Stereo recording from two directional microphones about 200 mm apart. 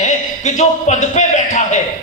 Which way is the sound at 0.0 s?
35° left (ahead or behind).